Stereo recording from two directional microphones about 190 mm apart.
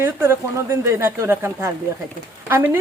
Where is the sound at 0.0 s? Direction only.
10° right (ahead or behind).